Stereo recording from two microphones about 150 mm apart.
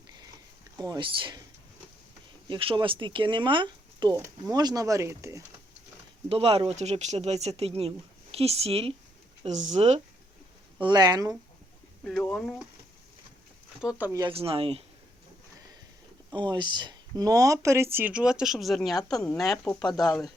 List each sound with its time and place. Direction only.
0.9 s speech: 35° right (ahead or behind)
2.5 s speech: 35° right (ahead or behind)
6.2 s speech: 40° right (ahead or behind)
10.8 s speech: 30° right (ahead or behind)
12.0 s speech: 10° left (ahead or behind)
14.1 s speech: 25° right (ahead or behind)
14.3 s speech: 40° right (ahead or behind)
16.3 s speech: 30° right (ahead or behind); by 18.9 s centre (ahead or behind)
19.3 s speech: 25° left (ahead or behind)
19.6 s speech: 5° left (ahead or behind)